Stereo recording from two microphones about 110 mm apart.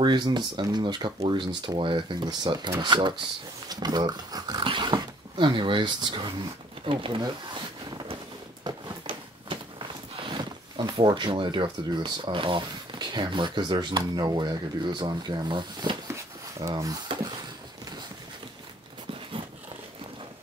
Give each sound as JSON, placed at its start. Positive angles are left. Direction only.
{"t": 0.0, "sound": "speech", "side_deg": -45}
{"t": 8.6, "sound": "a sound", "side_deg": -50}
{"t": 10.2, "sound": "speech", "side_deg": -45}
{"t": 16.6, "sound": "speech", "side_deg": -35}